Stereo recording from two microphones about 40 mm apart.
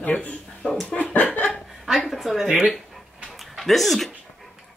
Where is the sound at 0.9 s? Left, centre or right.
Left.